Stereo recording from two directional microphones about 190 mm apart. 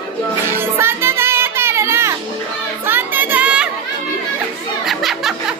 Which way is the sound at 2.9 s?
10° right (ahead or behind).